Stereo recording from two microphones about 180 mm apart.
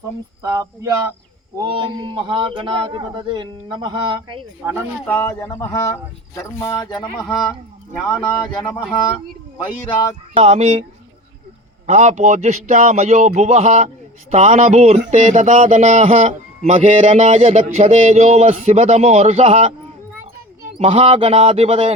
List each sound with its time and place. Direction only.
0.4 s a man's voice: 15° right (ahead or behind)
5.0 s speech: 10° left (ahead or behind)
10.3 s a man's voice: 35° right (ahead or behind)
11.9 s a man's voice: 40° right (ahead or behind)
20.7 s a man's voice: 35° right (ahead or behind)